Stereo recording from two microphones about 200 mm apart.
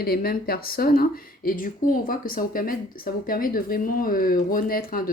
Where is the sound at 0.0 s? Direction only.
50° left (ahead or behind).